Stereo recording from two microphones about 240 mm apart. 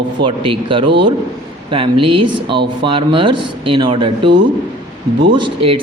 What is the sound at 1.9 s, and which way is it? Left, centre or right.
Speech, right.